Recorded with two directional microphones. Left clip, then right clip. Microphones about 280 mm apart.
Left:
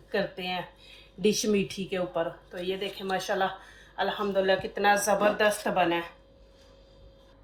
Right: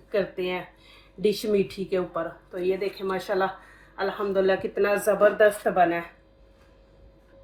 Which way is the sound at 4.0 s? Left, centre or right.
Centre.